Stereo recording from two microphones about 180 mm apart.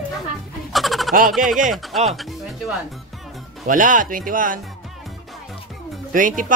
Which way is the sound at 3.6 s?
45° right (ahead or behind).